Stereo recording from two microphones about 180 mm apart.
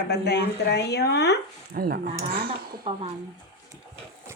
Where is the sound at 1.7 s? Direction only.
55° right (ahead or behind).